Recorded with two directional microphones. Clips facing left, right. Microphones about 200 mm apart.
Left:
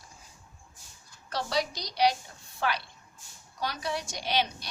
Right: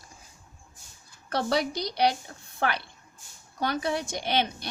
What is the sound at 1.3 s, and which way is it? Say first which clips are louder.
Speech: right 4 dB; 55° right (ahead or behind).